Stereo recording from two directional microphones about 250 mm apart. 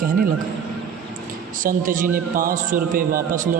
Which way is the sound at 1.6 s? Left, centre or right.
Right.